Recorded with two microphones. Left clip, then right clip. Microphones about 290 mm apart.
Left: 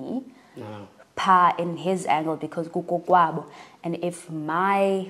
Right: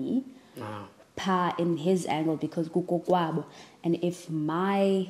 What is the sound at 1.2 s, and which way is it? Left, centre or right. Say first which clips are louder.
A woman's voice: left 9 dB; left.